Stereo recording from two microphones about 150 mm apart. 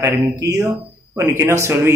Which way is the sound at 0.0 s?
20° right (ahead or behind).